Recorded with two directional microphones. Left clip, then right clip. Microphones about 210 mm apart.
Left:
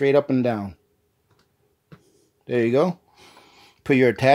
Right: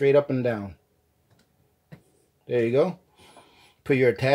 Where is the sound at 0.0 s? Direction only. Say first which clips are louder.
Left 2 dB; 45° left (ahead or behind).